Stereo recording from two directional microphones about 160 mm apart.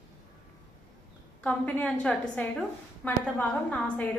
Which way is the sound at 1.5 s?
10° left (ahead or behind).